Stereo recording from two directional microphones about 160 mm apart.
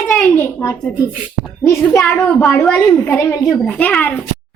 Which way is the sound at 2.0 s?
Centre (ahead or behind).